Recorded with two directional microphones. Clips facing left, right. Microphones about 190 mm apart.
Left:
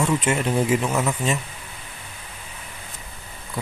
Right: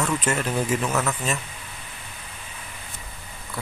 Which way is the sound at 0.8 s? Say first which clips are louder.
Left 2 dB; 10° left (ahead or behind).